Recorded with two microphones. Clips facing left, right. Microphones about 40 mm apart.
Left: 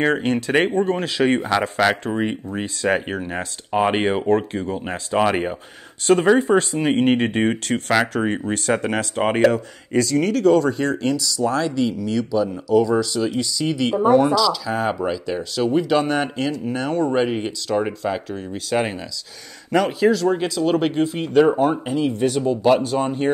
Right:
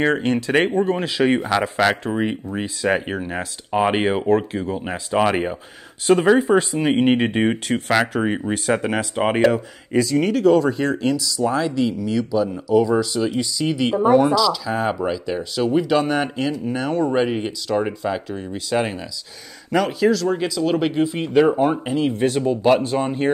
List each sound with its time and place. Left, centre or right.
0.0 s speech: centre